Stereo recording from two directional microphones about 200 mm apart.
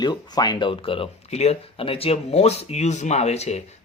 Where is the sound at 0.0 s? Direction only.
20° left (ahead or behind).